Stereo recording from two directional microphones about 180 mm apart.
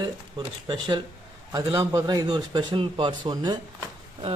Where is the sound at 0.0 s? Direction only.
25° right (ahead or behind).